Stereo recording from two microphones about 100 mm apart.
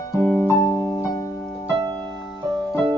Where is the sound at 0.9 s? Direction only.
35° left (ahead or behind).